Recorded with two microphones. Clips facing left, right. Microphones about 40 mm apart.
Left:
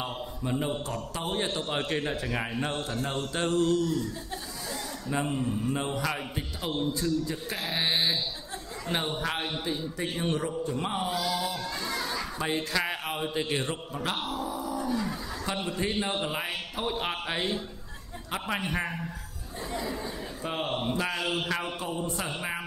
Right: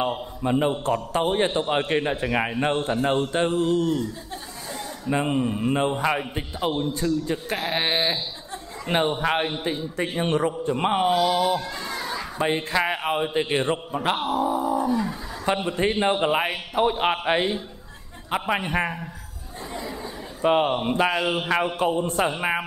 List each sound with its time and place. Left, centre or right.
0.0 s a man's voice: right
5.9 s a man's voice: right
6.9 s a man's voice: right
11.6 s children playing: centre
12.4 s a man's voice: right
14.9 s speech: centre
15.4 s a man's voice: right
19.7 s a sound: centre
20.4 s a man's voice: right
21.2 s a man's voice: right
21.7 s a man's voice: right